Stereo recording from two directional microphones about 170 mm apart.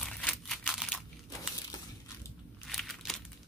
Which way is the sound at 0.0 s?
5° left (ahead or behind).